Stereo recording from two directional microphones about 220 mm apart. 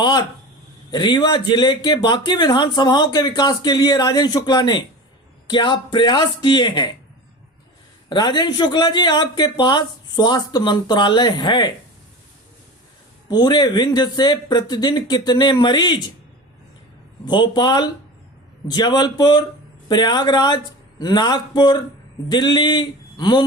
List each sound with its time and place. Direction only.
0.9 s speech: 20° left (ahead or behind)
8.1 s speech: 20° left (ahead or behind)
13.3 s speech: 20° left (ahead or behind)
17.2 s speech: 20° left (ahead or behind)